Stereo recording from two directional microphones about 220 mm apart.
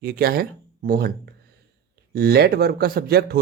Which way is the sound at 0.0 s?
45° right (ahead or behind).